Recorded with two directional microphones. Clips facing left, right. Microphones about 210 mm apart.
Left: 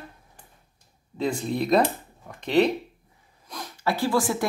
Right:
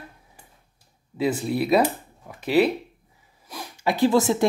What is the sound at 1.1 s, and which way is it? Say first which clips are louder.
Speech: right 3 dB; 5° right (ahead or behind).